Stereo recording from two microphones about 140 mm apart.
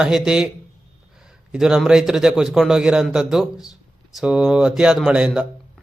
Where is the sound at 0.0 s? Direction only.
5° right (ahead or behind).